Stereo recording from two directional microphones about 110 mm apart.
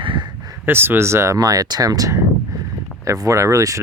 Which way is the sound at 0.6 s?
20° right (ahead or behind).